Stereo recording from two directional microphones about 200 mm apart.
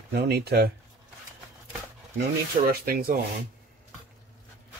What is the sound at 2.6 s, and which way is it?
Speech, 50° right (ahead or behind).